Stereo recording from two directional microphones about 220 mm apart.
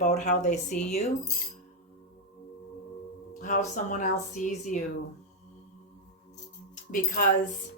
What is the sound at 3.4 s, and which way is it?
Speech, 35° left (ahead or behind).